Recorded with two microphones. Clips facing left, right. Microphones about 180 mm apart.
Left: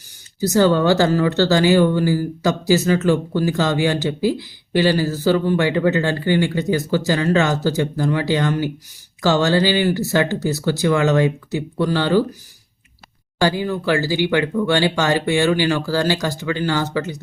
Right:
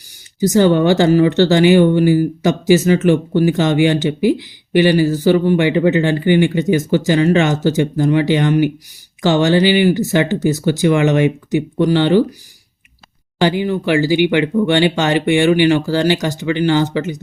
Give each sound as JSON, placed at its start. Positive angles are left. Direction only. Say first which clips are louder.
{"t": 0.3, "sound": "speech", "louder": "right 3 dB", "side_deg": -15}
{"t": 13.4, "sound": "speech", "louder": "right 3 dB", "side_deg": -20}